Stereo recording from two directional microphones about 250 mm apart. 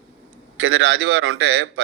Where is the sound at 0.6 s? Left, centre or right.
Right.